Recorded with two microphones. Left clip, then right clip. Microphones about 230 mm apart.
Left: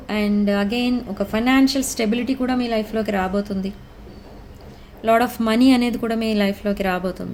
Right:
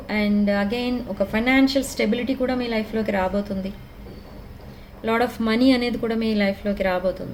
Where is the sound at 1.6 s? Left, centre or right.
Left.